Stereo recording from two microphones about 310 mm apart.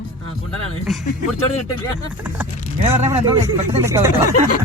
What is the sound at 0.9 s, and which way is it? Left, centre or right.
Speech, centre.